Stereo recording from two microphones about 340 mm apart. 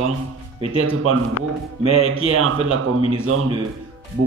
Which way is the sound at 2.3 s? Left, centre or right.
Right.